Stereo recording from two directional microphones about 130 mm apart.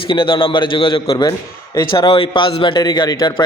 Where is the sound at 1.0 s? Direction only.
30° left (ahead or behind).